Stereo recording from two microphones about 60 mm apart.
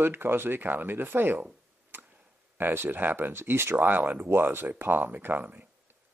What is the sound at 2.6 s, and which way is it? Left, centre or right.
Speech, right.